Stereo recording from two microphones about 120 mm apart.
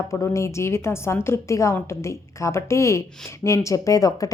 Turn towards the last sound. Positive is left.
turn(degrees=30)  # may be behind; listen again after turning